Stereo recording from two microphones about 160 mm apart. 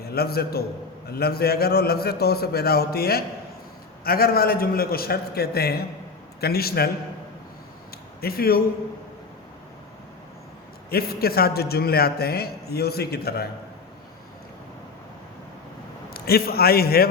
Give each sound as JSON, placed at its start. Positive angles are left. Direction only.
{"t": 0.0, "sound": "a man's voice", "side_deg": 75}
{"t": 8.2, "sound": "a man's voice", "side_deg": 70}
{"t": 10.8, "sound": "a man's voice", "side_deg": 75}
{"t": 16.0, "sound": "a man's voice", "side_deg": 75}